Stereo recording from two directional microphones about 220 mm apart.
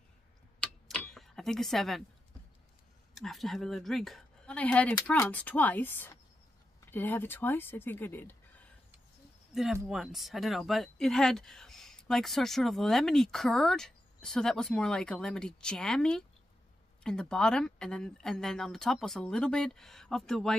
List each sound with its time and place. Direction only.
0.8 s a sound: centre (ahead or behind)
3.2 s speech: centre (ahead or behind)
9.5 s speech: centre (ahead or behind)